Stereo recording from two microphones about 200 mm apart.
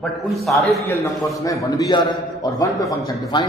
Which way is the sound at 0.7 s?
15° left (ahead or behind).